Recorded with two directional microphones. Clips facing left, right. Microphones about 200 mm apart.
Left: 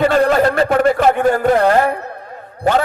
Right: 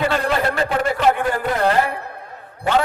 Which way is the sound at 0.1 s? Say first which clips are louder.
Left 7 dB; 45° left (ahead or behind).